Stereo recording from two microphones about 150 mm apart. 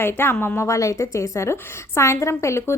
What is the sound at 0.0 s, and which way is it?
A woman's voice, 15° left (ahead or behind).